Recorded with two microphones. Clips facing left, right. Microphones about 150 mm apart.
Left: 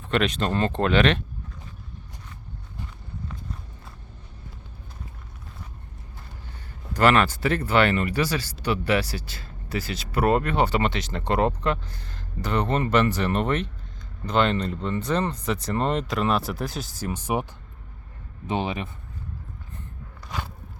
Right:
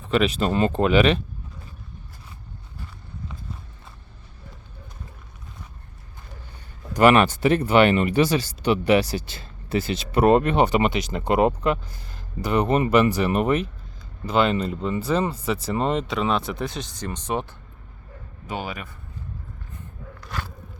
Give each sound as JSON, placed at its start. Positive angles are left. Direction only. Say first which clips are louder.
{"t": 0.0, "sound": "speech", "louder": "right 3 dB", "side_deg": -5}
{"t": 6.9, "sound": "speech", "louder": "right 4 dB", "side_deg": -15}
{"t": 18.4, "sound": "speech", "louder": "left 4 dB", "side_deg": 25}